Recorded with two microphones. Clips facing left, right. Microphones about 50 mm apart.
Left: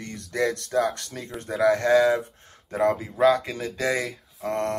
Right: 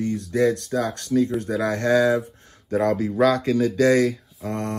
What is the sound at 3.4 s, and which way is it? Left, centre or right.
A man's voice, left.